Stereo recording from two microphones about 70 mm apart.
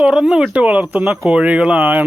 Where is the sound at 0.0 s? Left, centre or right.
Centre.